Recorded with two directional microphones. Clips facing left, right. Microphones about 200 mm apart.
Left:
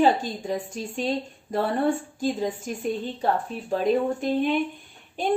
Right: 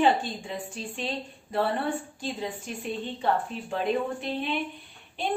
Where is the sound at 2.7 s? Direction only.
40° left (ahead or behind).